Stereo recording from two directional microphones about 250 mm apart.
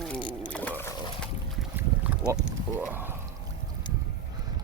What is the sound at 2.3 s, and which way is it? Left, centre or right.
Wild animals, centre.